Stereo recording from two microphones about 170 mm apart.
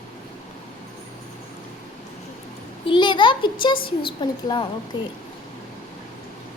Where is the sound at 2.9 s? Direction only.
25° left (ahead or behind).